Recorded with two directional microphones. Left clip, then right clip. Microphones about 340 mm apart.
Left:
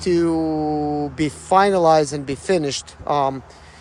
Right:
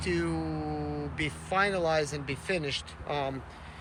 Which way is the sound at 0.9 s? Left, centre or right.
Centre.